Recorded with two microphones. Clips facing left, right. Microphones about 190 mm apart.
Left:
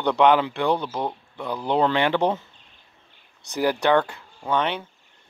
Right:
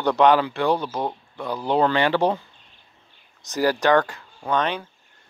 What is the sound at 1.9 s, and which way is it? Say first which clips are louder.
Speech: right 1 dB; 15° left (ahead or behind).